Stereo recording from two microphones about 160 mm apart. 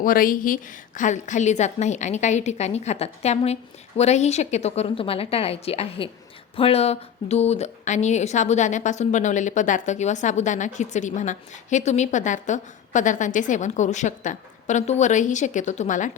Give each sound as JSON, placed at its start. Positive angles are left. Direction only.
{"t": 0.0, "sound": "a woman's voice", "side_deg": 60}